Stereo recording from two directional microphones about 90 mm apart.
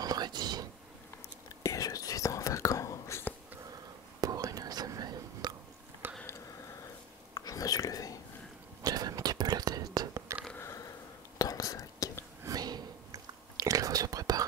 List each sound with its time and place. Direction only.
0.0 s a sound: 50° right (ahead or behind)
1.6 s whispering: 40° left (ahead or behind)
4.2 s whispering: 45° right (ahead or behind)
6.0 s a sound: 20° right (ahead or behind)
7.3 s whispering: 45° left (ahead or behind)
8.8 s whispering: 45° right (ahead or behind)
11.3 s whispering: 40° left (ahead or behind)
12.4 s whispering: 50° right (ahead or behind)